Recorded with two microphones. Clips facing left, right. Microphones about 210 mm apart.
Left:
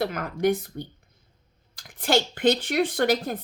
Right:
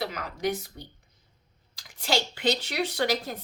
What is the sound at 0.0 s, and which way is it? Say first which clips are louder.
A woman's voice: left 6 dB; 50° left (ahead or behind).